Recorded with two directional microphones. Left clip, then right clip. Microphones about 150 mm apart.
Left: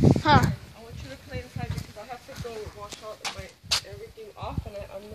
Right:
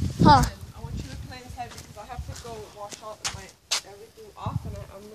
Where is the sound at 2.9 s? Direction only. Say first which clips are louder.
Right 3 dB; 40° left (ahead or behind).